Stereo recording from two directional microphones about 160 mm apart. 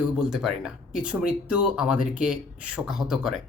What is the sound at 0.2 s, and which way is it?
Speech, 5° right (ahead or behind).